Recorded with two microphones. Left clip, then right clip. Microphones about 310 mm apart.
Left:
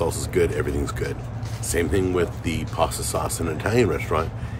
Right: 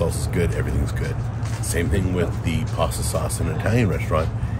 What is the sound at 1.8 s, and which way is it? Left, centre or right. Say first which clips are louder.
Speech: left 3 dB; centre.